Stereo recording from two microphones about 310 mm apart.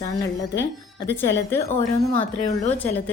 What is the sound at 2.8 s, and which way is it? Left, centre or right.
Speech, centre.